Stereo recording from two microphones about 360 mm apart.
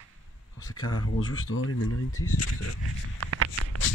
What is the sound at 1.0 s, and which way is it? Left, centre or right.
Speech, left.